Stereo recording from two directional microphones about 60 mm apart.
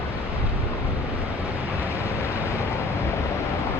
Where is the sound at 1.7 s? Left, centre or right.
Right.